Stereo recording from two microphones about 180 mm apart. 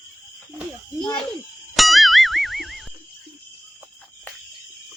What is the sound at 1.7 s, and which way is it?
Music, centre (ahead or behind).